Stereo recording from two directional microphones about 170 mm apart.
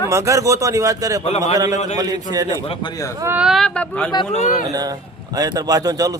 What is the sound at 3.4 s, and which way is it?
Speech, centre (ahead or behind).